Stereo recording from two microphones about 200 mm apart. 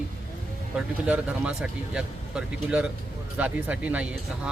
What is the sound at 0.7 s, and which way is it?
Speech, 5° right (ahead or behind).